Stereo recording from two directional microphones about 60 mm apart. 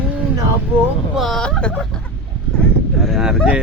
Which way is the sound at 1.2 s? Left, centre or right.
Centre.